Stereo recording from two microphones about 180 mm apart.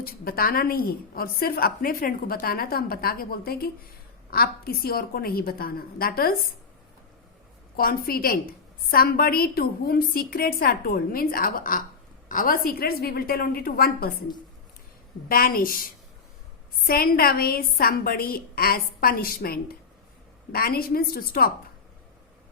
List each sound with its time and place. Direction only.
0.0 s a woman's voice: 55° left (ahead or behind)
7.8 s a woman's voice: 55° left (ahead or behind)
15.3 s a woman's voice: 55° left (ahead or behind)